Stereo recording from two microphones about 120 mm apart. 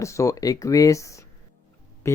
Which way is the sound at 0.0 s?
25° left (ahead or behind).